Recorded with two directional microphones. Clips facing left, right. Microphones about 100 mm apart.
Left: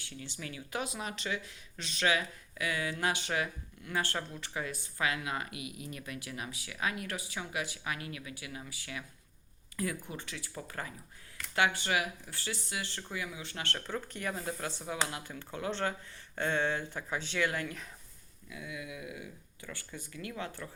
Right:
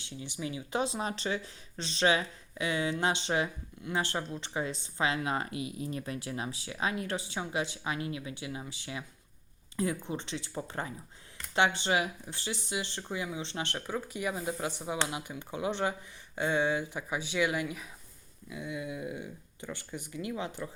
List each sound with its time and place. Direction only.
0.0 s speech: 20° right (ahead or behind)
18.4 s speech: 25° right (ahead or behind)